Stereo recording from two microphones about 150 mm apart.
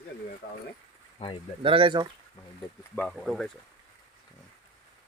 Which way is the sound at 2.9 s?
5° left (ahead or behind).